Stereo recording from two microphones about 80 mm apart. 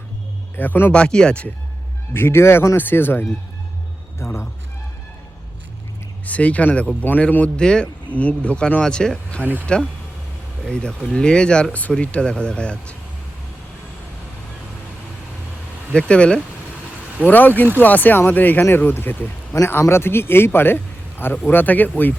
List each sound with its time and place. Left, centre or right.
0.5 s speech: left
0.9 s speech: centre
2.1 s speech: left
6.2 s speech: centre
9.4 s speech: right
10.7 s speech: centre
15.9 s speech: centre